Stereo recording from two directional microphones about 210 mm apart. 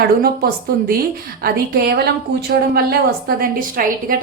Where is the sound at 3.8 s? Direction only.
45° right (ahead or behind).